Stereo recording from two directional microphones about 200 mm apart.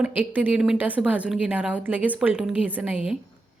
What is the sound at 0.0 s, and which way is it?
A woman's voice, 5° right (ahead or behind).